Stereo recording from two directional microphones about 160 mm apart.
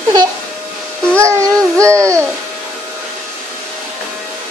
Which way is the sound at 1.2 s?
20° right (ahead or behind).